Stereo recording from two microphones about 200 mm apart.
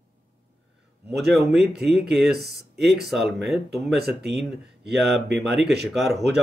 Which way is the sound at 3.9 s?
55° right (ahead or behind).